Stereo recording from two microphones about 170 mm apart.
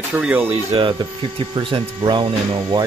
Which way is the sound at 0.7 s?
30° right (ahead or behind).